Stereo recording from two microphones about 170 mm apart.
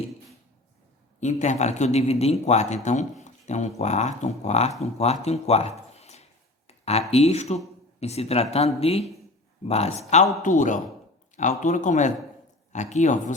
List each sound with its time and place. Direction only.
1.2 s speech: 45° left (ahead or behind)
6.0 s a sound: 40° left (ahead or behind)
7.1 s speech: 40° left (ahead or behind)